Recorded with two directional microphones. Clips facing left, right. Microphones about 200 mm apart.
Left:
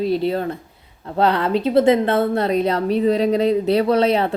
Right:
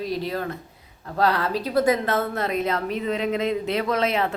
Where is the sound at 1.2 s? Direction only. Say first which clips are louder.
Left 5 dB; 25° left (ahead or behind).